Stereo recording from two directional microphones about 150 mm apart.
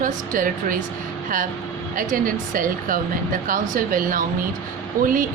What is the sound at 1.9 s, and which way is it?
Speech, 65° right (ahead or behind).